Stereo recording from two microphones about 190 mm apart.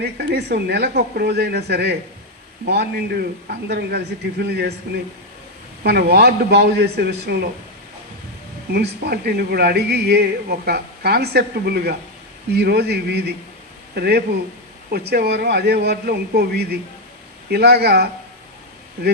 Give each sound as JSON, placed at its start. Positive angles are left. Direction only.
{"t": 0.0, "sound": "speech", "side_deg": -60}
{"t": 5.8, "sound": "speech", "side_deg": -60}
{"t": 8.7, "sound": "speech", "side_deg": -55}